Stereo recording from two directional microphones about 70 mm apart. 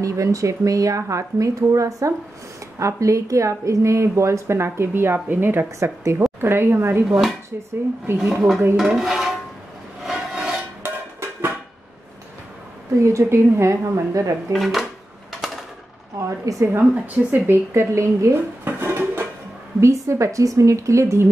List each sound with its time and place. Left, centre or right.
0.0 s a woman's voice: right
5.8 s a woman's voice: right
7.1 s dishes: centre
8.2 s speech: centre
8.7 s dishes: centre
10.0 s rub: centre
10.8 s music: right
13.0 s speech: right
14.5 s dishes: centre
16.2 s speech: right
16.7 s speech: right
17.7 s dishes: right
19.8 s speech: right